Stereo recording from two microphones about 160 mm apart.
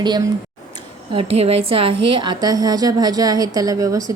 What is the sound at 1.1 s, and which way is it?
A woman's voice, 40° right (ahead or behind).